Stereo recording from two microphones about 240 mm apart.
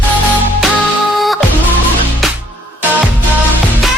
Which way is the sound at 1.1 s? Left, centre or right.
Centre.